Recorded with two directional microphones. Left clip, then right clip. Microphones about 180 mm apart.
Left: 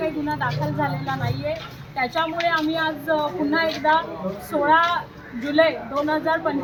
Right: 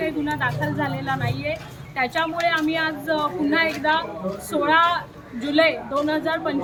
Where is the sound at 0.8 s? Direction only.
5° right (ahead or behind).